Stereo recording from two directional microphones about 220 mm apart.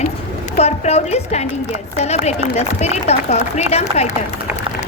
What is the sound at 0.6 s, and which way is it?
A woman's voice, 30° left (ahead or behind).